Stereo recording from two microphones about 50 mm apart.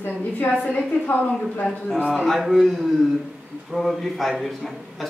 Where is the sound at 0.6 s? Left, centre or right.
Left.